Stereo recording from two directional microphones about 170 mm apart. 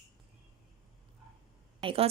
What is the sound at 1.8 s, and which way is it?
Speech, 35° right (ahead or behind).